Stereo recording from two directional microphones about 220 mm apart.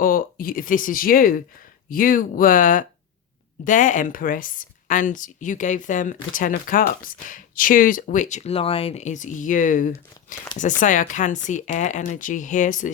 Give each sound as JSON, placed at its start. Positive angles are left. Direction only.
{"t": 0.0, "sound": "speech", "side_deg": 40}